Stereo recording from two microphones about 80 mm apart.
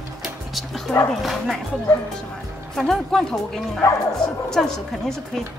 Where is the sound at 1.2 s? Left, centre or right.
Centre.